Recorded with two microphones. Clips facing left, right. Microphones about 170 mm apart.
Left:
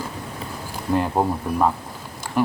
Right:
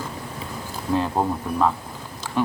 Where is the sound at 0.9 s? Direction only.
15° left (ahead or behind).